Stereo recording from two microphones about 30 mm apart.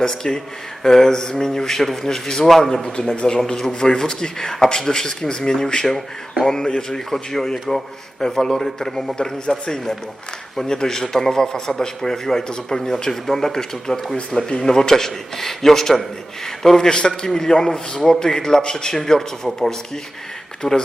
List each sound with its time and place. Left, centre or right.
0.0 s speech: left
2.9 s a man's voice: left
4.4 s a man's voice: centre
20.6 s speech: left